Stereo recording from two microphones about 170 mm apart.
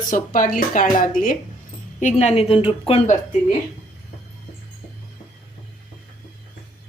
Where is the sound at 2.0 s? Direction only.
45° left (ahead or behind).